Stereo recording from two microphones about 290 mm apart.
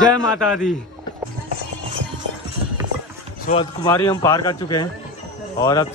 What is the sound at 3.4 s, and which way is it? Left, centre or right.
A man's voice, centre.